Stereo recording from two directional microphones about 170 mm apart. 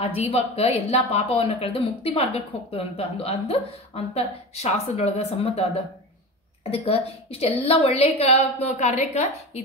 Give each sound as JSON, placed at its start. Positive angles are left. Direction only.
{"t": 0.0, "sound": "speech", "side_deg": 35}